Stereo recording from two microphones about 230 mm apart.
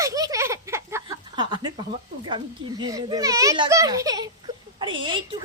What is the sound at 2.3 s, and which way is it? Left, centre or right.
A woman's voice, centre.